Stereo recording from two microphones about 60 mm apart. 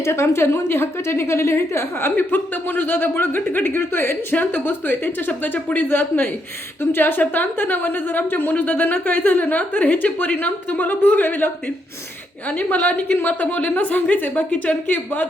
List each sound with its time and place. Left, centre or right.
0.0 s a woman's voice: left